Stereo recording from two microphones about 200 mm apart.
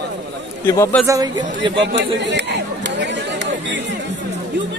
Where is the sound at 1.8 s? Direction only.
60° right (ahead or behind).